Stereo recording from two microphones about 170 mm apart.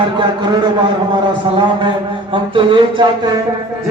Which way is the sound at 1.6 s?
30° right (ahead or behind).